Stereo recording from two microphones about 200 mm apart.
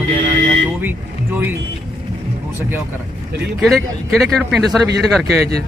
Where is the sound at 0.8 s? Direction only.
10° right (ahead or behind).